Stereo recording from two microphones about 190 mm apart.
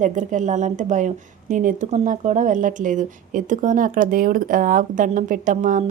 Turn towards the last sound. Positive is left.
turn(degrees=-40)  # may be behind; listen again after turning